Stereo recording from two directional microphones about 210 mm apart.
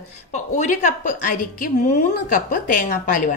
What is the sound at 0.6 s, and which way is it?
A woman's voice, 35° left (ahead or behind).